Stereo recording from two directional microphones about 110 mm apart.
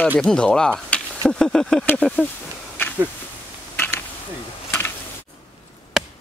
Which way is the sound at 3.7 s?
20° left (ahead or behind).